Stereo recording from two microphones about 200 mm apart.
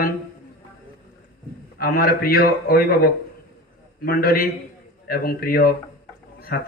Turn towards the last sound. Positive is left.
turn(degrees=50)  # may be behind; listen again after turning